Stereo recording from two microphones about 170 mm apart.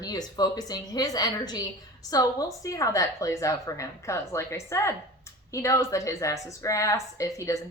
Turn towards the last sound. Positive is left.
turn(degrees=20)  # may be behind; listen again after turning